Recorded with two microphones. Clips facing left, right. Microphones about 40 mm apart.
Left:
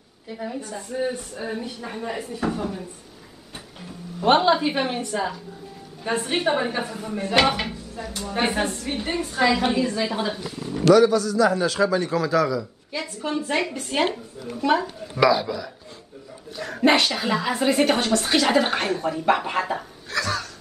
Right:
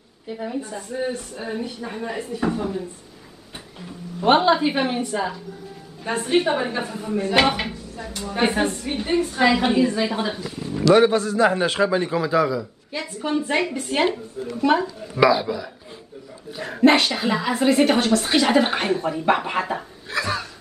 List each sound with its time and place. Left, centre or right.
0.3 s a woman's voice: centre
4.2 s a woman's voice: centre
11.0 s a man's voice: right; by 12.6 s centre
12.9 s a woman's voice: centre
16.8 s a woman's voice: centre
20.1 s a sound: right